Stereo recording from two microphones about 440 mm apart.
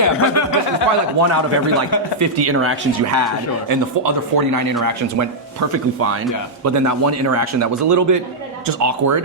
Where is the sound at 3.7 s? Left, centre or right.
Right.